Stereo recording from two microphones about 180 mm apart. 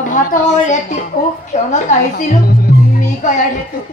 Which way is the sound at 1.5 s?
45° left (ahead or behind).